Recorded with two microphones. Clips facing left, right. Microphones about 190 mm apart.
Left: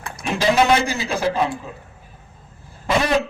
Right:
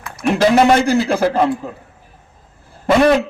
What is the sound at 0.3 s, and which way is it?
A man's voice, 55° right (ahead or behind).